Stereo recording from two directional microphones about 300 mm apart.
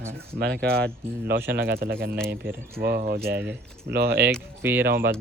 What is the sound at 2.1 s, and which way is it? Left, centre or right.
Speech, centre.